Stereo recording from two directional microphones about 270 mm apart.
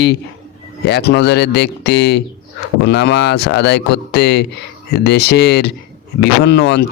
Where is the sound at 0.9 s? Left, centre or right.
Left.